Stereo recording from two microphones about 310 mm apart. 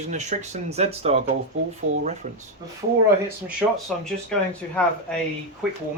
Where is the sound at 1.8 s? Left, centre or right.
Right.